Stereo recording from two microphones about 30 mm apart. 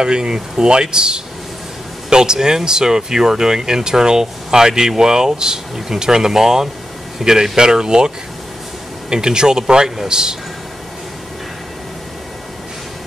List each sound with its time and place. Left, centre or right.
0.0 s speech: right
9.1 s speech: right